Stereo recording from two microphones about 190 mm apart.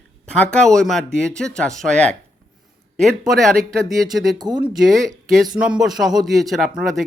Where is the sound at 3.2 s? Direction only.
Centre (ahead or behind).